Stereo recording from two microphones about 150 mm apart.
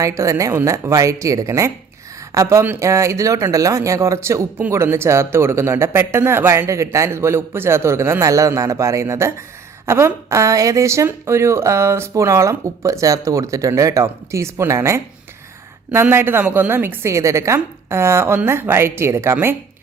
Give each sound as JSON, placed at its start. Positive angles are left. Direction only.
{"t": 0.0, "sound": "a woman's voice", "side_deg": -20}